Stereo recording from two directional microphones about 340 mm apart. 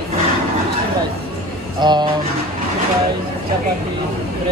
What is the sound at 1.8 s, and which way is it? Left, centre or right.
Speech, centre.